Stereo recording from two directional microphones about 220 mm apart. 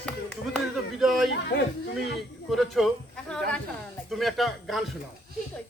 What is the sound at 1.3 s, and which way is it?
Speech, 50° left (ahead or behind).